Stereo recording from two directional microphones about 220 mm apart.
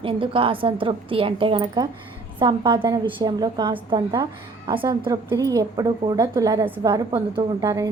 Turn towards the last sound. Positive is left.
turn(degrees=-15)  # may be behind; listen again after turning